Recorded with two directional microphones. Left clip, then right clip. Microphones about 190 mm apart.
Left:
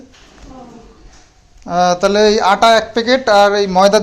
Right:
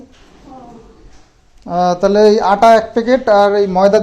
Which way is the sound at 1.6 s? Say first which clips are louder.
Even; 20° right (ahead or behind).